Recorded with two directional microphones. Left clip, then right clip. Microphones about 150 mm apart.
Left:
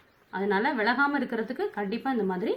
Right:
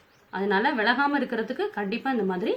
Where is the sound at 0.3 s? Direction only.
5° right (ahead or behind).